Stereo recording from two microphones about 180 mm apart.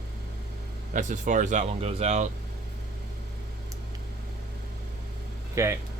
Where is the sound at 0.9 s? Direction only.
45° right (ahead or behind).